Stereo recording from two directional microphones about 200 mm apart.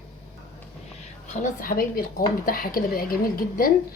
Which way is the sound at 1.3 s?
40° left (ahead or behind).